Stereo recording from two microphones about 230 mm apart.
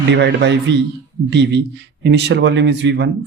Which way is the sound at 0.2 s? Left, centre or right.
Right.